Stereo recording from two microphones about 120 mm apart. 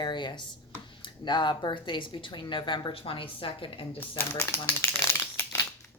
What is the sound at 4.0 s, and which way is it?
Crumpling, 20° left (ahead or behind).